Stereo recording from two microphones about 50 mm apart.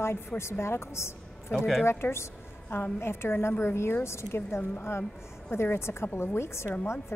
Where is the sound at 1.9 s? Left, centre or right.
Left.